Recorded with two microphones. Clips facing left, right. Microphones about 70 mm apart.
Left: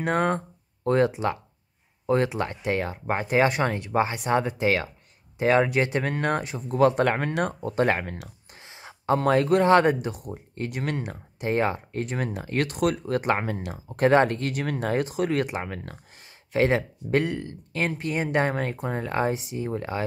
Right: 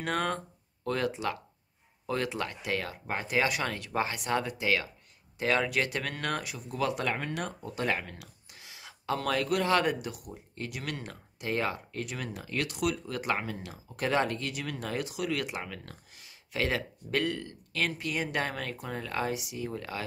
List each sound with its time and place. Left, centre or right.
0.0 s speech: left